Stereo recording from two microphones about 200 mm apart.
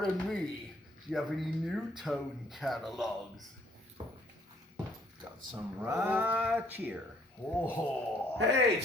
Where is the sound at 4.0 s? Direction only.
25° right (ahead or behind).